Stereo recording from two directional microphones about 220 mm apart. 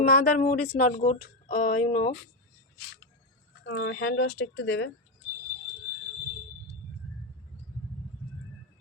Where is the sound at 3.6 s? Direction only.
55° left (ahead or behind).